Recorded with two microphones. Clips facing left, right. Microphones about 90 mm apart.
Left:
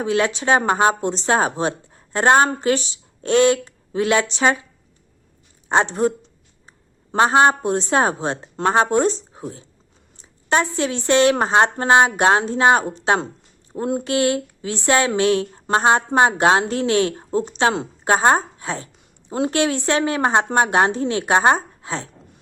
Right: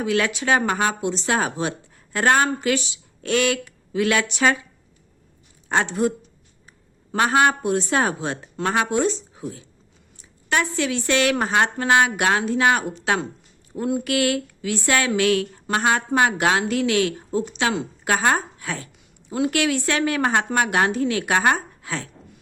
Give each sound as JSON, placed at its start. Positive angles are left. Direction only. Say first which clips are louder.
{"t": 0.0, "sound": "speech", "louder": "left 2 dB", "side_deg": 30}
{"t": 5.6, "sound": "a woman's voice", "louder": "left 3 dB", "side_deg": 25}